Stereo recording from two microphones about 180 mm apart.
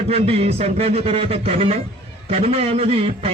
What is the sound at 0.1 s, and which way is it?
A man's voice, 35° right (ahead or behind).